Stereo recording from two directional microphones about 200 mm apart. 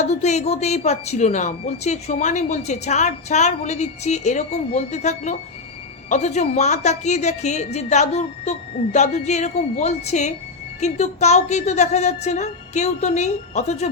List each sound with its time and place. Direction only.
0.0 s a woman's voice: 35° left (ahead or behind)